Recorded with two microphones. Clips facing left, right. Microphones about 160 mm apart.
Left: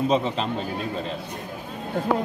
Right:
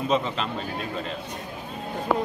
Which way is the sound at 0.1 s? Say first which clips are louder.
Left 2 dB; 35° left (ahead or behind).